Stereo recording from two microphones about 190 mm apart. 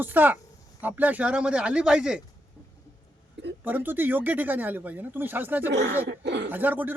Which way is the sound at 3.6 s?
10° right (ahead or behind).